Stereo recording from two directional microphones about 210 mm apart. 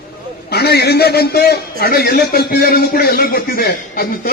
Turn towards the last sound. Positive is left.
turn(degrees=45)  # may be behind; listen again after turning